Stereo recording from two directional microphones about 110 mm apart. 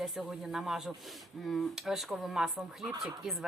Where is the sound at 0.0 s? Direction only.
Centre (ahead or behind).